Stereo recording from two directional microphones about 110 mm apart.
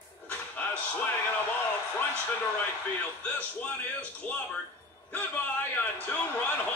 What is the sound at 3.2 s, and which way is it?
Speech, 15° left (ahead or behind).